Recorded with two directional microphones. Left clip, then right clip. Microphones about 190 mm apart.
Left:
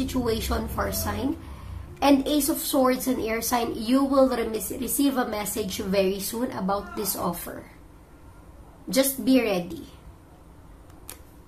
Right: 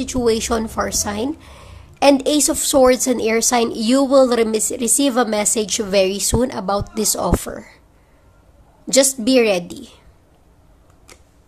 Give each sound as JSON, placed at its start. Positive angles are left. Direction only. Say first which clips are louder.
{"t": 0.0, "sound": "a woman's voice", "louder": "right 9 dB", "side_deg": -40}
{"t": 8.8, "sound": "a woman's voice", "louder": "right 8 dB", "side_deg": -45}